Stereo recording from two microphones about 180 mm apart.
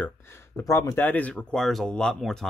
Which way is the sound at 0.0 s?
15° left (ahead or behind).